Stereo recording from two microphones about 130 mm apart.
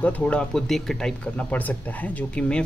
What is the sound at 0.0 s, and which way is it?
Speech, 10° left (ahead or behind).